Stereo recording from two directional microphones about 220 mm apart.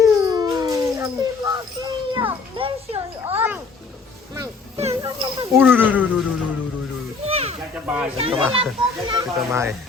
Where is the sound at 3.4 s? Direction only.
10° right (ahead or behind).